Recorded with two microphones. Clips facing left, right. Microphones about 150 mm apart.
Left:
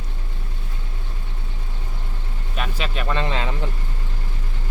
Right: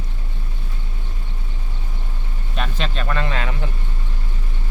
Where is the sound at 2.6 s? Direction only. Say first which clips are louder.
Right 1 dB; 5° left (ahead or behind).